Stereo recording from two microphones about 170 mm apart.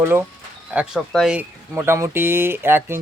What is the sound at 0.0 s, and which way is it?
Speech, 15° right (ahead or behind).